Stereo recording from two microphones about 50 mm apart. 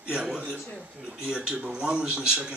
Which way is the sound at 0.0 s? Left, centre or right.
Centre.